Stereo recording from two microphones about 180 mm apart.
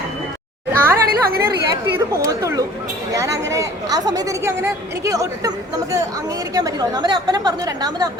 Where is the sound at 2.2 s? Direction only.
20° right (ahead or behind).